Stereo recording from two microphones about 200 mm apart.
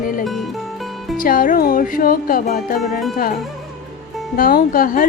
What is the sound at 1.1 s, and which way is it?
Speech, 45° left (ahead or behind).